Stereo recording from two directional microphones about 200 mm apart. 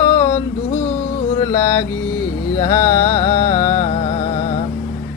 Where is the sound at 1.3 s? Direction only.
20° left (ahead or behind).